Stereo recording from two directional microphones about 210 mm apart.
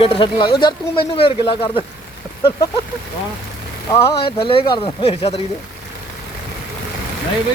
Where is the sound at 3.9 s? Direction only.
20° left (ahead or behind).